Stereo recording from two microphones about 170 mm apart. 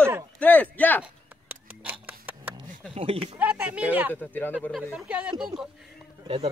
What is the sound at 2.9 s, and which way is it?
Speech, 35° right (ahead or behind).